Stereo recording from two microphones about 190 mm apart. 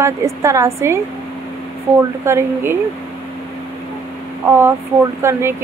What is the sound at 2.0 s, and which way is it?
Speech, 15° right (ahead or behind).